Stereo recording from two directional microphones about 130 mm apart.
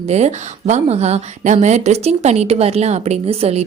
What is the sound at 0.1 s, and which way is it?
Speech, 55° right (ahead or behind).